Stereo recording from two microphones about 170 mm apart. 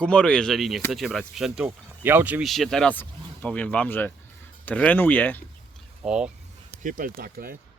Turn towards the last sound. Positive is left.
turn(degrees=-60)  # may be behind; listen again after turning